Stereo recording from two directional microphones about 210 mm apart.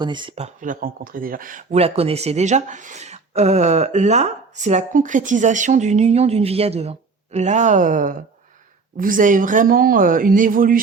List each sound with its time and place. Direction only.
0.0 s speech: 20° right (ahead or behind); by 10.8 s 40° right (ahead or behind)